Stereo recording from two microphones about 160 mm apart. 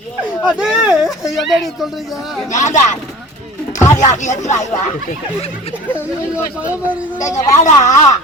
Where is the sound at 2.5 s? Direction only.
50° left (ahead or behind).